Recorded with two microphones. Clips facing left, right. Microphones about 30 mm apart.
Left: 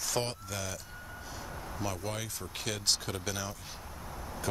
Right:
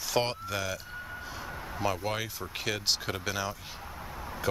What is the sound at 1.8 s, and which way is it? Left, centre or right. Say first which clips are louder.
Speech: right 6 dB; right.